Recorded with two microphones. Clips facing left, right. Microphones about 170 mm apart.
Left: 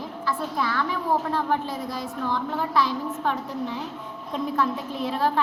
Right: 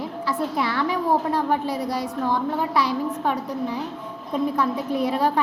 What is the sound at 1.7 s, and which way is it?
Speech, 70° right (ahead or behind).